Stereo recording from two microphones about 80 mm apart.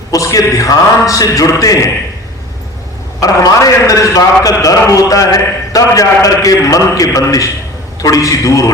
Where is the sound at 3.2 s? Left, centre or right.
Left.